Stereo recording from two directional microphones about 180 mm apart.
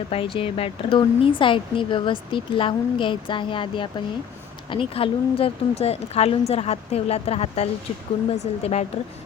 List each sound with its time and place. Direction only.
0.1 s a woman's voice: 30° left (ahead or behind)